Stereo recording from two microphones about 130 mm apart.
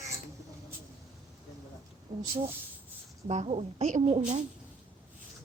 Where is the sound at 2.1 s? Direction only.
65° right (ahead or behind).